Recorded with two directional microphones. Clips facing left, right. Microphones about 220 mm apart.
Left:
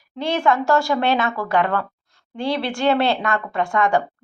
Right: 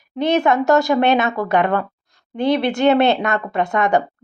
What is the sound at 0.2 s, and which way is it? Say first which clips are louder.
Speech: right 4 dB; 20° right (ahead or behind).